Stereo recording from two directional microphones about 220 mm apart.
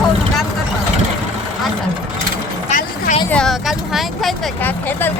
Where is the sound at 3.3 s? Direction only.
5° left (ahead or behind).